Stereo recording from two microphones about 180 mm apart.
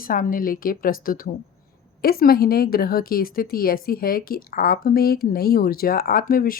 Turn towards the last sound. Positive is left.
turn(degrees=50)  # may be behind; listen again after turning